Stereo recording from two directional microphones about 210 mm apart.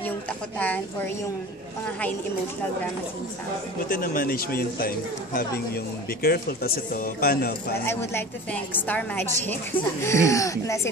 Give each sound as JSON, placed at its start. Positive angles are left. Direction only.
{"t": 0.0, "sound": "a woman's voice", "side_deg": 5}
{"t": 3.9, "sound": "speech", "side_deg": 45}
{"t": 7.8, "sound": "a woman's voice", "side_deg": 10}